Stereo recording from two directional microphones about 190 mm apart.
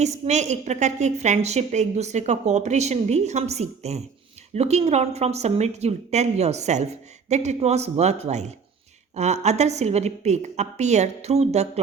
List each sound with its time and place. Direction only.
0.0 s a woman's voice: 35° right (ahead or behind)